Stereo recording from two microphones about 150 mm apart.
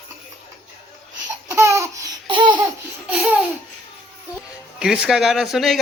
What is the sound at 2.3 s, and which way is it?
Laughter, 30° right (ahead or behind).